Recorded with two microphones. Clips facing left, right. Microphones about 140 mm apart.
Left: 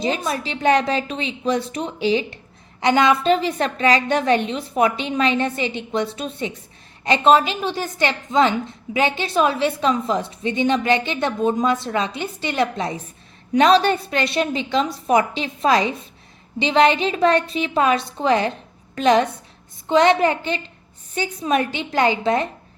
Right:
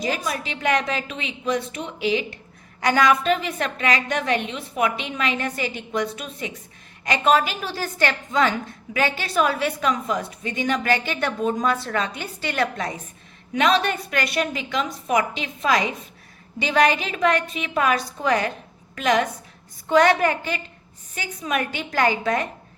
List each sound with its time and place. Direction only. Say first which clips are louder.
0.0 s a woman's voice: left 3 dB; 25° left (ahead or behind)
13.5 s a woman's voice: left 6 dB; 35° left (ahead or behind)